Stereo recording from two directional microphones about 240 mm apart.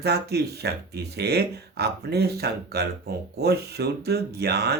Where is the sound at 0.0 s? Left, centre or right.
Right.